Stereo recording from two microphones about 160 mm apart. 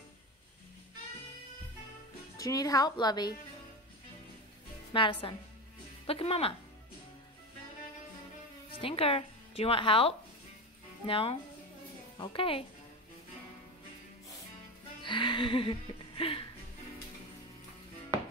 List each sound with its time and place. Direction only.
2.3 s a woman's voice: 20° left (ahead or behind)
4.9 s speech: 35° left (ahead or behind)
8.7 s speech: 35° left (ahead or behind)
15.0 s music: 30° left (ahead or behind)